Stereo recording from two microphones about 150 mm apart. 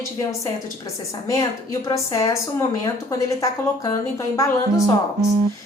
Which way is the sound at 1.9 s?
20° left (ahead or behind).